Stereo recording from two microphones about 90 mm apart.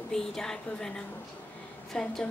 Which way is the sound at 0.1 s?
5° left (ahead or behind).